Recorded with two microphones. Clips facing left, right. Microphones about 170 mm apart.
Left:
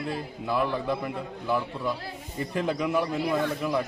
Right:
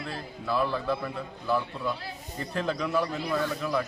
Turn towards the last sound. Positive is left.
turn(degrees=15)  # may be behind; listen again after turning